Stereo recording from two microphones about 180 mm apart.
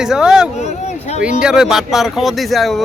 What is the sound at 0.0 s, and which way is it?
Speech, 5° right (ahead or behind).